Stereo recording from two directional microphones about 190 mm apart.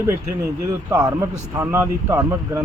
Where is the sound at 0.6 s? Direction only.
20° right (ahead or behind).